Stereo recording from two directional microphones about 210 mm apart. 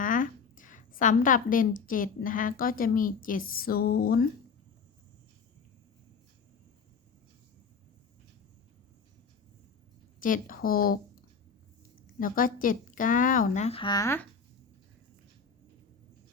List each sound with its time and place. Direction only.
0.0 s a woman's voice: 40° left (ahead or behind)
10.2 s speech: 40° left (ahead or behind)
12.2 s speech: 40° left (ahead or behind); by 14.3 s 15° left (ahead or behind)